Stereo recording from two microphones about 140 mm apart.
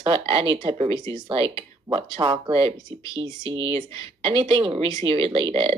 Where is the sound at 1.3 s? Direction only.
40° right (ahead or behind).